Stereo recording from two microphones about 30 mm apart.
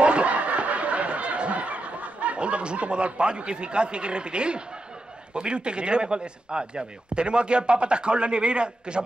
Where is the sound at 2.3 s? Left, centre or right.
Right.